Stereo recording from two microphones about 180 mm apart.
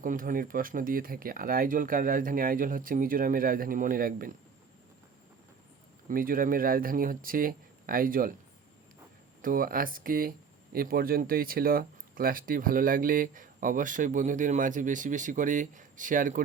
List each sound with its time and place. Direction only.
0.0 s speech: 50° right (ahead or behind)
6.1 s speech: 50° right (ahead or behind)
9.4 s speech: 50° right (ahead or behind)